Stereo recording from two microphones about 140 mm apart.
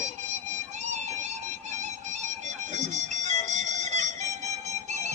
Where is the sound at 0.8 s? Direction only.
55° right (ahead or behind).